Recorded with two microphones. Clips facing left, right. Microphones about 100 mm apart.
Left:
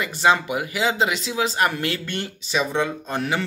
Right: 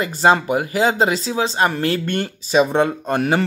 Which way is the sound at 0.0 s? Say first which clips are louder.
Right 4 dB; 40° right (ahead or behind).